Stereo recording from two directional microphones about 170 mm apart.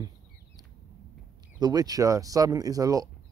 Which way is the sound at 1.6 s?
25° right (ahead or behind).